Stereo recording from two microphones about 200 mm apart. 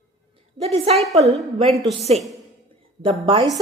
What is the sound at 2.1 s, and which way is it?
A woman's voice, 30° right (ahead or behind).